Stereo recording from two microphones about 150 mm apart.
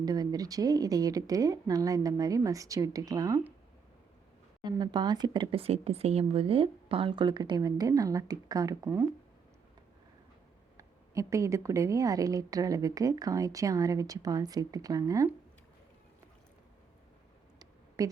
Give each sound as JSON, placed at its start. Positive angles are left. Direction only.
{"t": 0.0, "sound": "speech", "side_deg": -25}
{"t": 4.6, "sound": "speech", "side_deg": -30}
{"t": 10.8, "sound": "speech", "side_deg": -20}
{"t": 17.6, "sound": "a sound", "side_deg": -25}